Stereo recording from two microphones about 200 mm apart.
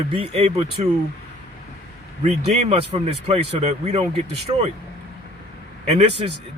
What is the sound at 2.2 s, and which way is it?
Speech, 35° right (ahead or behind).